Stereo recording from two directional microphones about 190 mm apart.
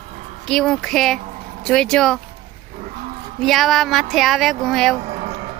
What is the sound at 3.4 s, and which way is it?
Speech, centre (ahead or behind).